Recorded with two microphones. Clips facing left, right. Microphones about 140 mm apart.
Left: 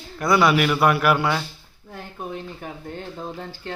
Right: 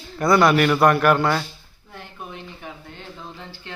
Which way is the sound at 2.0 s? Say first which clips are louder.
Left 4 dB; 40° left (ahead or behind).